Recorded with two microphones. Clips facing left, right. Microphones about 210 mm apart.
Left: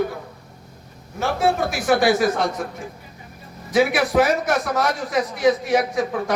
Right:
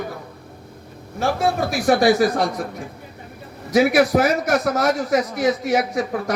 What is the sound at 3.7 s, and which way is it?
A man's voice, 40° right (ahead or behind).